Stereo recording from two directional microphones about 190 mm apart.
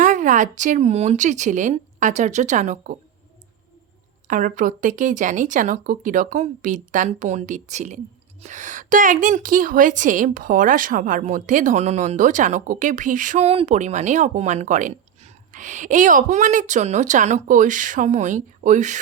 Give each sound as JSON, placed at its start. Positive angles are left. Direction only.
{"t": 0.0, "sound": "speech", "side_deg": -40}
{"t": 4.3, "sound": "speech", "side_deg": -45}